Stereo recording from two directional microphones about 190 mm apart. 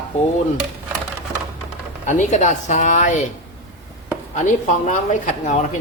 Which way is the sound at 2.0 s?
40° left (ahead or behind).